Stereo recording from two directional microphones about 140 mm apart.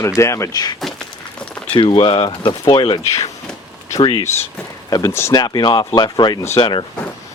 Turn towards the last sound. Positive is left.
turn(degrees=35)  # may be behind; listen again after turning